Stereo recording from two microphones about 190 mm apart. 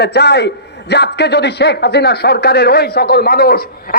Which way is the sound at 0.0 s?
60° left (ahead or behind).